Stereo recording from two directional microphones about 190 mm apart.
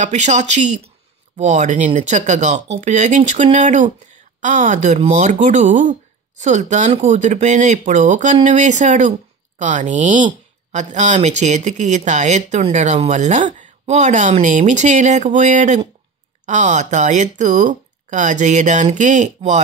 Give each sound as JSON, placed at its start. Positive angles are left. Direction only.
{"t": 0.0, "sound": "speech", "side_deg": -40}